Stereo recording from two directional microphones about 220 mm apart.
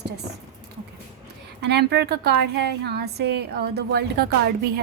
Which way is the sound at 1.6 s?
50° right (ahead or behind).